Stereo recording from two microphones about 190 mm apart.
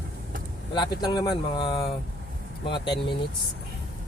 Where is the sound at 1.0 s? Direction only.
20° left (ahead or behind).